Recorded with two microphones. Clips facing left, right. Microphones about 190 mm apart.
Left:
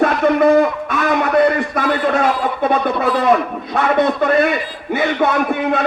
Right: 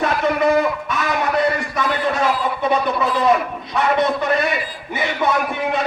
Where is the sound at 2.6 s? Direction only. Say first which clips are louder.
Left 2 dB; 55° left (ahead or behind).